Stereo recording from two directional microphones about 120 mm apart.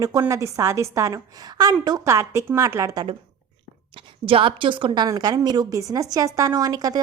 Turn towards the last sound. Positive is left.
turn(degrees=-30)  # may be behind; listen again after turning